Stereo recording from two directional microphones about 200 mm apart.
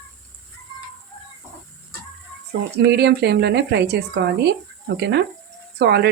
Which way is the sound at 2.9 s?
55° right (ahead or behind).